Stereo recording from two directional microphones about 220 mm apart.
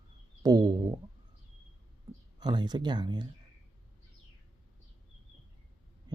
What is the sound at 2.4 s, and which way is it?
Speech, 20° right (ahead or behind).